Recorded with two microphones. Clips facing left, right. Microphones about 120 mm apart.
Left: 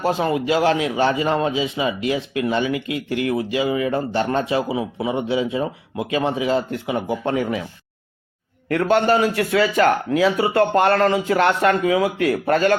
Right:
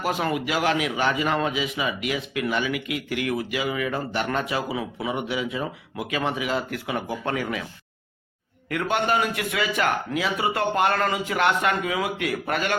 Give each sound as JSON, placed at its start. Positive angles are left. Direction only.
{"t": 0.0, "sound": "a man's voice", "side_deg": 25}
{"t": 8.7, "sound": "speech", "side_deg": 35}